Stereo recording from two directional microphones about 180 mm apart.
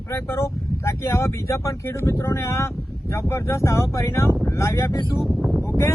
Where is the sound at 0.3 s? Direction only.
15° left (ahead or behind).